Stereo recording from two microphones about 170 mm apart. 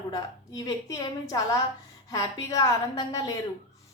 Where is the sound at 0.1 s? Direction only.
20° left (ahead or behind).